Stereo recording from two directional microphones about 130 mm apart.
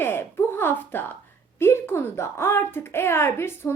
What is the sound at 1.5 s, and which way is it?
A woman's voice, 20° left (ahead or behind).